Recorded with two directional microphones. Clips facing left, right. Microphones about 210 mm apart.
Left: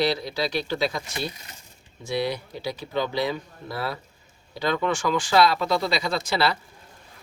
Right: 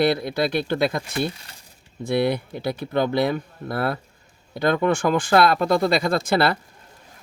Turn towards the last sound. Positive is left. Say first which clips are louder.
# right 5 dB
turn(degrees=-55)  # may be behind; listen again after turning